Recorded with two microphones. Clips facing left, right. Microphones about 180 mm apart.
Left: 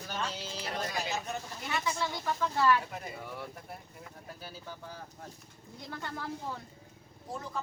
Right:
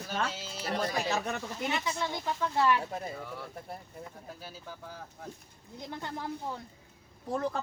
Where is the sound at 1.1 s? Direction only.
70° right (ahead or behind).